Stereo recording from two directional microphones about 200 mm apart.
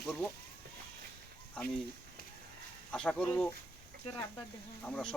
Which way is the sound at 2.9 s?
5° left (ahead or behind).